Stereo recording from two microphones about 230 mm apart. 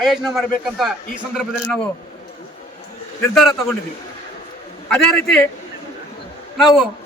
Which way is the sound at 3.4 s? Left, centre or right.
Centre.